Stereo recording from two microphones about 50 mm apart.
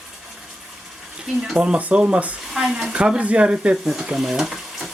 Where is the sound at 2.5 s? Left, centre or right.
Centre.